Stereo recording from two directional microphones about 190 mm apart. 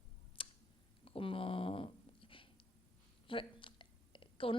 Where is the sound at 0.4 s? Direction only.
25° left (ahead or behind).